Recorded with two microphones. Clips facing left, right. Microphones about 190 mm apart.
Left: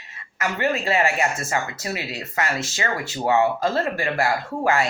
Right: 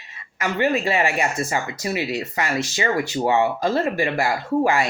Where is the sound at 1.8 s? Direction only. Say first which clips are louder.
Right 5 dB; 15° right (ahead or behind).